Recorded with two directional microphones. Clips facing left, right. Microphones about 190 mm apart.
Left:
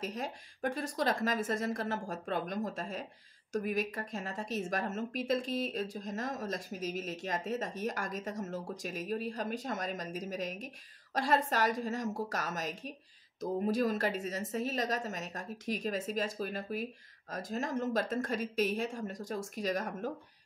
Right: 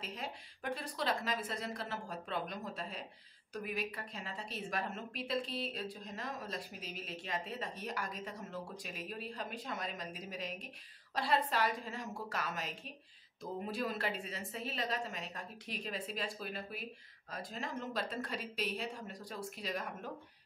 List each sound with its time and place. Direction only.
0.0 s a woman's voice: 45° left (ahead or behind)